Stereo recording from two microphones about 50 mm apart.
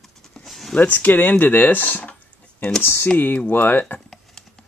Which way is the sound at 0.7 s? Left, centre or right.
Left.